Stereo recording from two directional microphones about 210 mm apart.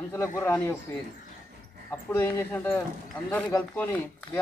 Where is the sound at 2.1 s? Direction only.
10° left (ahead or behind).